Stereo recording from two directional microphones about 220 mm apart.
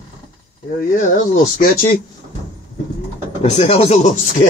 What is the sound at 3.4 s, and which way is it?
Speech, 30° left (ahead or behind).